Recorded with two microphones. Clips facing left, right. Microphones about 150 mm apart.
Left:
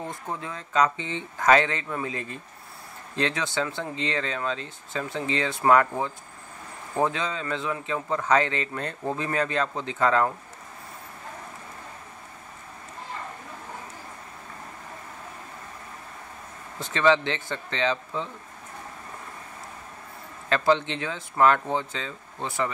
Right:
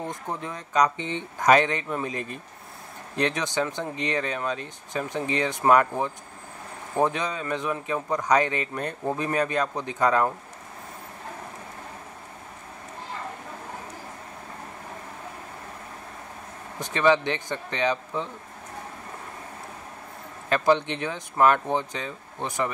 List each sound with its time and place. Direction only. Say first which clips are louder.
0.0 s speech: right 1 dB; 20° right (ahead or behind)
16.8 s speech: even; 15° right (ahead or behind)
20.4 s a man's voice: right 1 dB; 15° right (ahead or behind)